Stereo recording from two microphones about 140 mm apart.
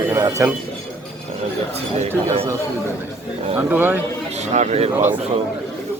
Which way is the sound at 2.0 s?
50° right (ahead or behind).